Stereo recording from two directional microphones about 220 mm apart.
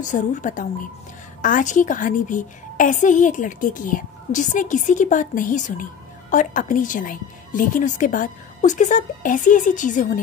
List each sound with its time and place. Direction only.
0.0 s a woman's voice: 35° left (ahead or behind)